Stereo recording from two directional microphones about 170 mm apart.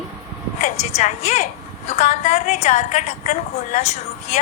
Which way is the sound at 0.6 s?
40° left (ahead or behind).